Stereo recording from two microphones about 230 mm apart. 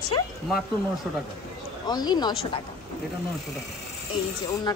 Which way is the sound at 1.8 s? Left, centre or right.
Centre.